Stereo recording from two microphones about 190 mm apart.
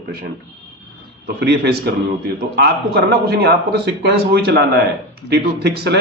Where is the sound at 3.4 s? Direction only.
60° right (ahead or behind).